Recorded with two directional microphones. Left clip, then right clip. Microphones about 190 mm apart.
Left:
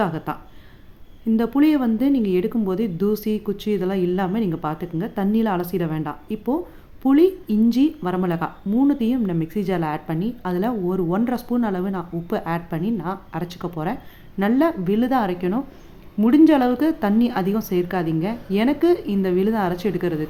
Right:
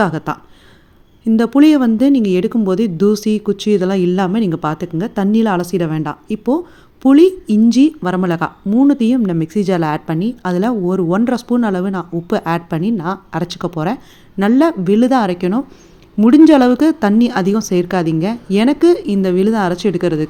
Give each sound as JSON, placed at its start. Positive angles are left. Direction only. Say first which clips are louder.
{"t": 0.0, "sound": "a woman's voice", "louder": "right 7 dB", "side_deg": -35}